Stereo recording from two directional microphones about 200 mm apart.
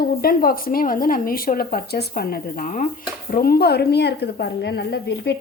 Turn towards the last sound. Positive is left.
turn(degrees=55)  # may be behind; listen again after turning